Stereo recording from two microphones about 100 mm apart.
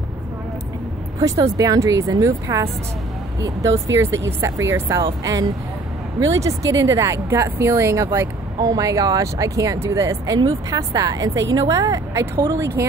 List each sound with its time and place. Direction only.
1.2 s speech: 35° right (ahead or behind)